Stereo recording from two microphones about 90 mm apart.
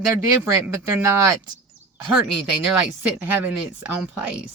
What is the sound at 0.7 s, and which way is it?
Speech, 35° right (ahead or behind).